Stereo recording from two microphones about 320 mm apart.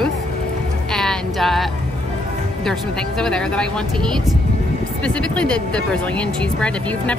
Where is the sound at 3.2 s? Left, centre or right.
Centre.